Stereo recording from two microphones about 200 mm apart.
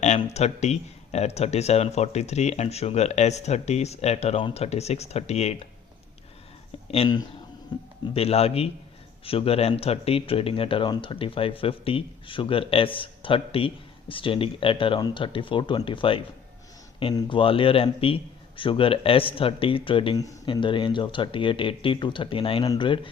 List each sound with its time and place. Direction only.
0.0 s speech: 35° left (ahead or behind)
6.9 s a man's voice: 25° left (ahead or behind)